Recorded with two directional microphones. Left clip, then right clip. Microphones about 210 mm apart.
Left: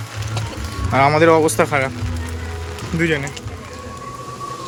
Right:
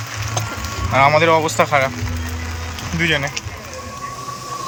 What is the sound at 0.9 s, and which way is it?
Speech, 20° left (ahead or behind).